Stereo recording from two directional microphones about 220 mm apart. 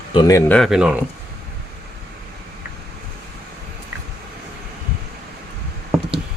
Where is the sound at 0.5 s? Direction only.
Centre (ahead or behind).